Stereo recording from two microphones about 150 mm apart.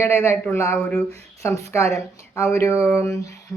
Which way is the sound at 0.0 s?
15° left (ahead or behind).